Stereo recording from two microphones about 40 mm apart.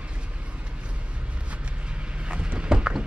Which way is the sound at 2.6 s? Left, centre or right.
Right.